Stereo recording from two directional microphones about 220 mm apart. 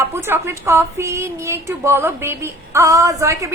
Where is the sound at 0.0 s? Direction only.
10° right (ahead or behind).